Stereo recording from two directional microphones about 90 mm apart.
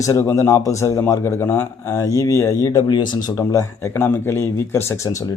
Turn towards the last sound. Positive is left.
turn(degrees=35)  # may be behind; listen again after turning